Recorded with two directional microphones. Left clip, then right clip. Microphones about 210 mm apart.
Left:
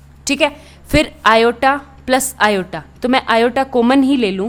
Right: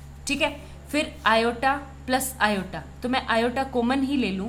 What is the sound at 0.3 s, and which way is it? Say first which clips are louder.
A woman's voice: left 10 dB; 45° left (ahead or behind).